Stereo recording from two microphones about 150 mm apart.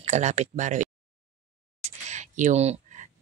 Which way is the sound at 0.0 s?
50° right (ahead or behind).